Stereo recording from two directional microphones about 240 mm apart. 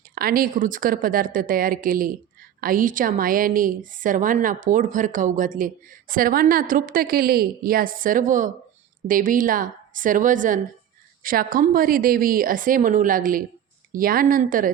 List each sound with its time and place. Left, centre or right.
0.1 s a woman's voice: right